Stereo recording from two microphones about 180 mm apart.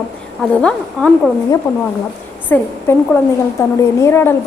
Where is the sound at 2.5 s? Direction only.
10° left (ahead or behind).